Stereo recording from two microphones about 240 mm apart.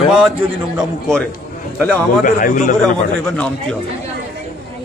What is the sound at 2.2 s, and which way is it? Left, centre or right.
Speech, left.